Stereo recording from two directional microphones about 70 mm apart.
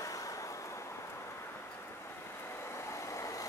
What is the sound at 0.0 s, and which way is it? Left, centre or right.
Vehicle, left.